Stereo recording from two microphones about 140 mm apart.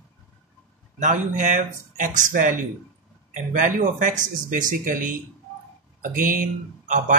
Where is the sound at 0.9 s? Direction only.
60° right (ahead or behind).